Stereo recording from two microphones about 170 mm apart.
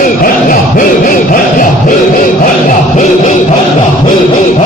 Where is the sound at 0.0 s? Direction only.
55° left (ahead or behind).